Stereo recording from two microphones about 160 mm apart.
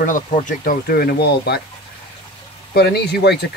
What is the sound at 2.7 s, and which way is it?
Speech, 85° left.